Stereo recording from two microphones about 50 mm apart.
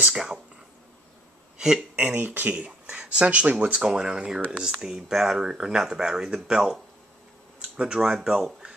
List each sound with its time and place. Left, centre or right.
0.1 s speech: centre
2.0 s speech: right
2.5 s speech: right